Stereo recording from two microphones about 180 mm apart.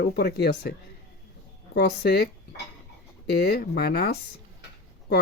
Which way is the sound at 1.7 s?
65° left (ahead or behind).